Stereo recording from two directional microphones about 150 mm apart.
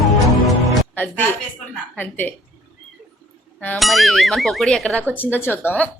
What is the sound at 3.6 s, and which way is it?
A woman's voice, 5° left (ahead or behind).